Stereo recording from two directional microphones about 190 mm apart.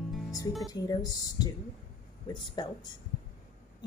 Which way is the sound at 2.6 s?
25° left (ahead or behind).